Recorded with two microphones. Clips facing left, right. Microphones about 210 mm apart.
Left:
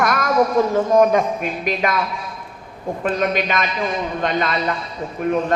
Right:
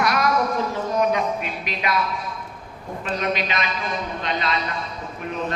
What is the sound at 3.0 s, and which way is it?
A man's voice, 50° left (ahead or behind).